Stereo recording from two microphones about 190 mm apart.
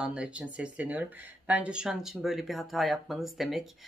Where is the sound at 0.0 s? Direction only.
5° right (ahead or behind).